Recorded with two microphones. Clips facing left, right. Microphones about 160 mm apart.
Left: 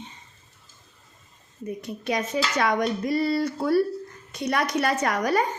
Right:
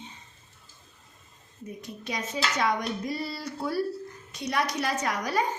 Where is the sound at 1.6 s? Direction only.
60° left (ahead or behind).